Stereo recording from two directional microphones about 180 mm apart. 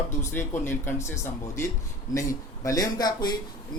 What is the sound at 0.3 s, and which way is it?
A man's voice, 10° left (ahead or behind).